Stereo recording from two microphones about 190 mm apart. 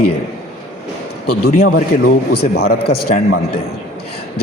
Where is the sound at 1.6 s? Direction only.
55° left (ahead or behind).